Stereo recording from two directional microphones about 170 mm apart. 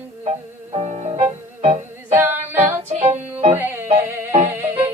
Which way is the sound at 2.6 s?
45° right (ahead or behind).